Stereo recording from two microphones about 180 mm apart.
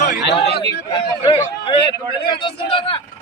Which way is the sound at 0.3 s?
70° left (ahead or behind).